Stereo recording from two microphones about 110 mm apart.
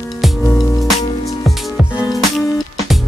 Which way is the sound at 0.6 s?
30° left (ahead or behind).